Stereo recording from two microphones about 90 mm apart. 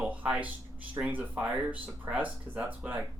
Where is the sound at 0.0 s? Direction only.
15° right (ahead or behind).